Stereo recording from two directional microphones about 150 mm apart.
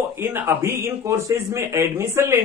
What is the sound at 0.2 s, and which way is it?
Speech, 15° right (ahead or behind).